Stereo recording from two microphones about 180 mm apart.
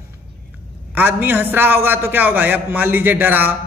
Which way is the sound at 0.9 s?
10° right (ahead or behind).